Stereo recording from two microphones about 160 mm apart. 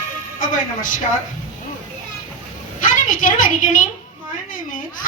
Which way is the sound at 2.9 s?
55° left (ahead or behind).